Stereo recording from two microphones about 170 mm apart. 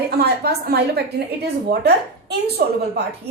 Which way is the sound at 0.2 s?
70° right (ahead or behind).